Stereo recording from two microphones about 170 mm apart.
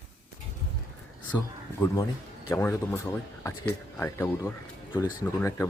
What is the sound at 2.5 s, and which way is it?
Speech, 15° left (ahead or behind).